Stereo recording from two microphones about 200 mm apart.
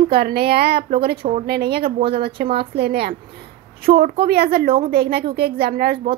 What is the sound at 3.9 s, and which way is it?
Speech, 30° right (ahead or behind).